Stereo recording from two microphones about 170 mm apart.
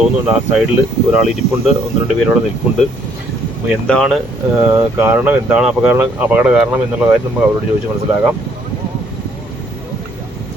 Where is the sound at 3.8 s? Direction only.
5° left (ahead or behind).